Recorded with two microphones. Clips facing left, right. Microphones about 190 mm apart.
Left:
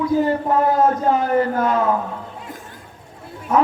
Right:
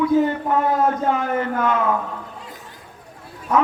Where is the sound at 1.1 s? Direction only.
35° left (ahead or behind).